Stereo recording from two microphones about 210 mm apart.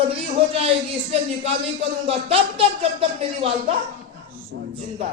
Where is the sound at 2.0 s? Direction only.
25° right (ahead or behind).